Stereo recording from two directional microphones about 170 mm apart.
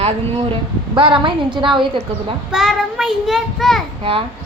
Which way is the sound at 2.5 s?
Centre (ahead or behind).